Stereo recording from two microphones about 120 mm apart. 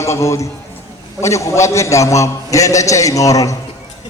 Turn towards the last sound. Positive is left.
turn(degrees=30)  # may be behind; listen again after turning